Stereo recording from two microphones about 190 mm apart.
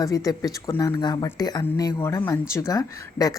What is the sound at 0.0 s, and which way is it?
Speech, 15° left (ahead or behind).